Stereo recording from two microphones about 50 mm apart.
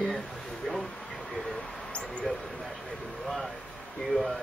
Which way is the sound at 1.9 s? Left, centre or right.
Left.